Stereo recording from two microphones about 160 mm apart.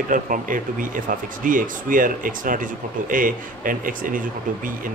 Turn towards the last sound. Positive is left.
turn(degrees=-60)  # may be behind; listen again after turning